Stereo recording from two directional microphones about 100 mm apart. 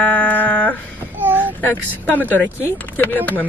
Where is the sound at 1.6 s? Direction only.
20° left (ahead or behind).